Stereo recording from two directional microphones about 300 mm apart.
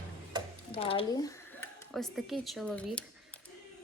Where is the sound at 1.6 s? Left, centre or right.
Centre.